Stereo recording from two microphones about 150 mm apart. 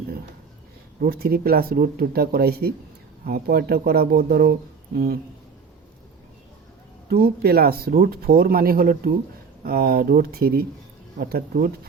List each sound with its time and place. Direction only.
1.0 s speech: 90° right
7.1 s speech: 90° right; by 9.1 s 75° right (ahead or behind)
9.6 s speech: 90° right